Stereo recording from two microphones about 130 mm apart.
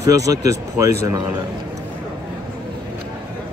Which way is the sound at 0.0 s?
25° right (ahead or behind).